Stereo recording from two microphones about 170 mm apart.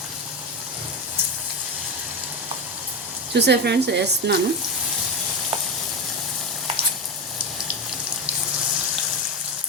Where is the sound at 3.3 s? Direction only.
75° right (ahead or behind).